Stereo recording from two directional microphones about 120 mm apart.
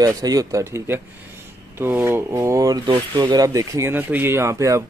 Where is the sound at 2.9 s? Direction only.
40° right (ahead or behind).